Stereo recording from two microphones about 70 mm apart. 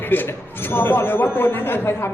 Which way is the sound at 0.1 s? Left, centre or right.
Left.